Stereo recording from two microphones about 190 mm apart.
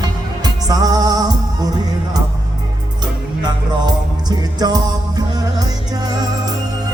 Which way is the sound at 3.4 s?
20° right (ahead or behind).